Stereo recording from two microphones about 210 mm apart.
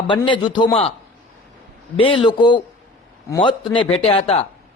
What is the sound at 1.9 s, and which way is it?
A man's voice, 25° left (ahead or behind).